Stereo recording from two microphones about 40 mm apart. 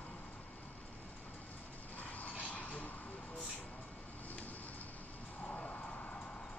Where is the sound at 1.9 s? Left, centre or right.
Left.